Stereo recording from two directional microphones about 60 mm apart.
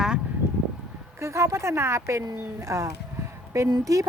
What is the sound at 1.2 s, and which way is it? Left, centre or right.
Speech, right.